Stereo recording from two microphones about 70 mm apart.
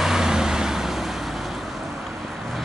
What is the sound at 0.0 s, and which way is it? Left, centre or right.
Vehicle, centre.